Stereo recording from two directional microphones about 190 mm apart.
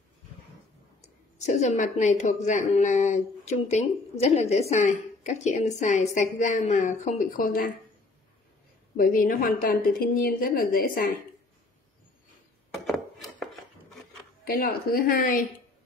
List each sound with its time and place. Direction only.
1.4 s a woman's voice: 35° left (ahead or behind)
8.9 s a woman's voice: 50° left (ahead or behind)
12.7 s chopping: centre (ahead or behind)
14.4 s a woman's voice: 50° left (ahead or behind)